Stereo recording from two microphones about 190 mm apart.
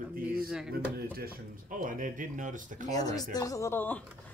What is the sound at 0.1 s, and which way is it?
Music, 50° right (ahead or behind).